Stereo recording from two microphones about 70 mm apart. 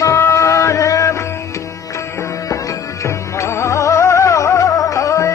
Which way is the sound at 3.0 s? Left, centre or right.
Left.